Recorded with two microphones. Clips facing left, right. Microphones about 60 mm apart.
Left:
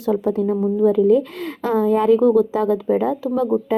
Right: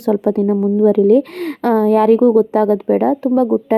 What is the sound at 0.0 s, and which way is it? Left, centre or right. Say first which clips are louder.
Speech: right 4 dB; right.